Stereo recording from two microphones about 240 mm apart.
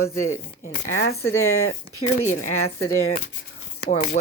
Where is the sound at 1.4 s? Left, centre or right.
Left.